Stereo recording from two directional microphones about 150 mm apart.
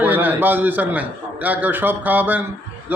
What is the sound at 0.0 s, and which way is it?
A man's voice, 10° right (ahead or behind).